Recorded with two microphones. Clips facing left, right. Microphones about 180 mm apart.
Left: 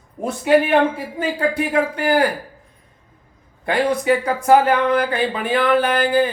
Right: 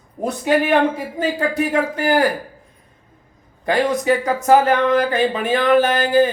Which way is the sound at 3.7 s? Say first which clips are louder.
Even; 40° right (ahead or behind).